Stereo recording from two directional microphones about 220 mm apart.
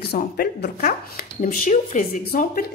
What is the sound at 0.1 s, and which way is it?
Speech, 45° left (ahead or behind).